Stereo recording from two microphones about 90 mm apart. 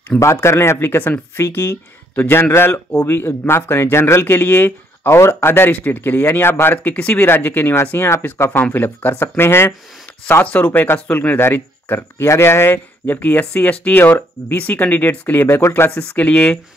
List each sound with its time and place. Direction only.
0.2 s speech: 30° left (ahead or behind)
15.9 s speech: 15° left (ahead or behind)